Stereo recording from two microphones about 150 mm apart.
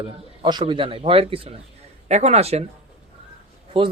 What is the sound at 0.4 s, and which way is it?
Speech, 30° right (ahead or behind).